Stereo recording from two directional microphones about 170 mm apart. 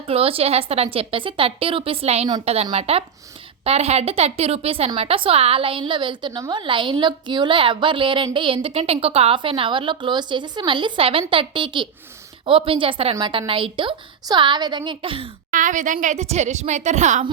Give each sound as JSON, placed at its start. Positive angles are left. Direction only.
{"t": 0.0, "sound": "a woman's voice", "side_deg": -35}
{"t": 15.5, "sound": "speech", "side_deg": -50}